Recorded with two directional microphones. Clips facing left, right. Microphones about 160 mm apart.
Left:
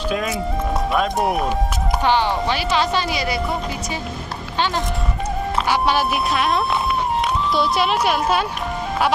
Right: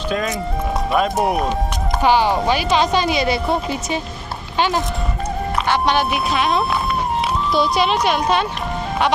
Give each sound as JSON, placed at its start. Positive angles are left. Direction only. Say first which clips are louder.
{"t": 0.1, "sound": "speech", "louder": "right 2 dB", "side_deg": 5}
{"t": 2.0, "sound": "speech", "louder": "right 3 dB", "side_deg": -10}
{"t": 4.5, "sound": "speech", "louder": "right 3 dB", "side_deg": -15}
{"t": 5.6, "sound": "speech", "louder": "right 2 dB", "side_deg": 5}